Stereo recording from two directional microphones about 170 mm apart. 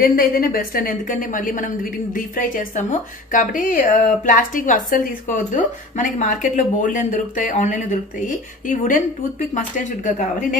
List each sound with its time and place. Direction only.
0.0 s a woman's voice: 60° left (ahead or behind)